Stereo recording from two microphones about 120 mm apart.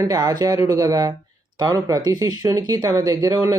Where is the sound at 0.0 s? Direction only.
30° right (ahead or behind).